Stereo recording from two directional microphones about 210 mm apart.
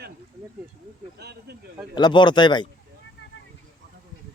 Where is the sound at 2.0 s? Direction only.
20° left (ahead or behind).